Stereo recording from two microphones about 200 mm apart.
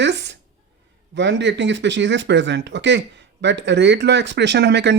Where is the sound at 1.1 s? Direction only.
65° right (ahead or behind).